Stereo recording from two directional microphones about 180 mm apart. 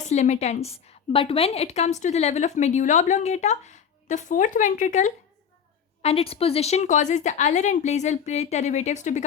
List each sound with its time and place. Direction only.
0.0 s a woman's voice: 40° left (ahead or behind)